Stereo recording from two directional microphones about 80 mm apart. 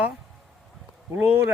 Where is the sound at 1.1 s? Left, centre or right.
Right.